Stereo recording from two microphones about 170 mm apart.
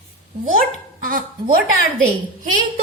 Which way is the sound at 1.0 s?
55° right (ahead or behind).